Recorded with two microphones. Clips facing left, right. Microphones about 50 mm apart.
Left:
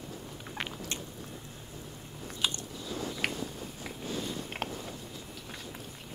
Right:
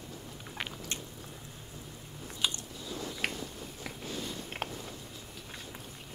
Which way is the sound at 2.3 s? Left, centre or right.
Left.